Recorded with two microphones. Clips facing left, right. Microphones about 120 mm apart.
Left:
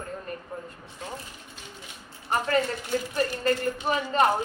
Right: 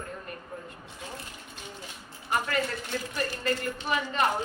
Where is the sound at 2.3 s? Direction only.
35° left (ahead or behind).